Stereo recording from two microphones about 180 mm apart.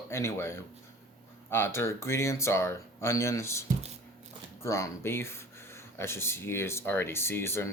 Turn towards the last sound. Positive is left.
turn(degrees=15)  # may be behind; listen again after turning